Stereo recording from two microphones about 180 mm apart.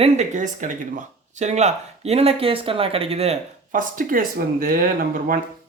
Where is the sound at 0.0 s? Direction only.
40° right (ahead or behind).